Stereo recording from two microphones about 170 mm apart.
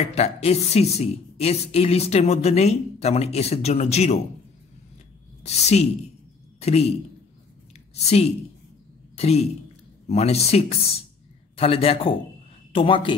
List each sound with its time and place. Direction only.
0.0 s a woman's voice: 40° left (ahead or behind)
5.4 s a woman's voice: 40° left (ahead or behind)
7.9 s a woman's voice: 40° left (ahead or behind)